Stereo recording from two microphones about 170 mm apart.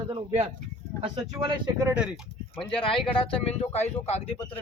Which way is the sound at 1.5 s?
25° right (ahead or behind).